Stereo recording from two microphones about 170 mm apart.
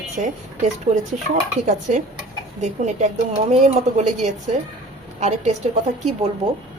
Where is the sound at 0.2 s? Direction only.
45° right (ahead or behind).